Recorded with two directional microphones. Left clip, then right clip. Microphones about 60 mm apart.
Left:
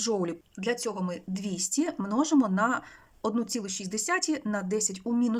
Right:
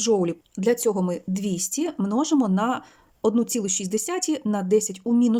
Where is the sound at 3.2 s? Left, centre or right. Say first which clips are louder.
Right 8 dB; right.